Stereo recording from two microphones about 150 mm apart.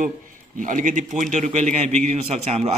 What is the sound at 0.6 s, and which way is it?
A man's voice, 65° right (ahead or behind).